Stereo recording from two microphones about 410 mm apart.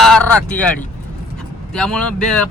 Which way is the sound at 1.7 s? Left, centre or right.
Centre.